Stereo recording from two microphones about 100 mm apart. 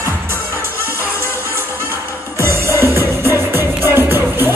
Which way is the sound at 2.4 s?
25° right (ahead or behind).